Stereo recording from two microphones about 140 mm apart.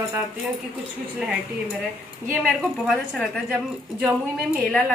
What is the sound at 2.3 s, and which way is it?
A woman's voice, 5° right (ahead or behind).